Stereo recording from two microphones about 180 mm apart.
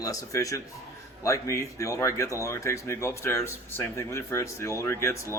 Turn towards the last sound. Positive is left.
turn(degrees=15)  # may be behind; listen again after turning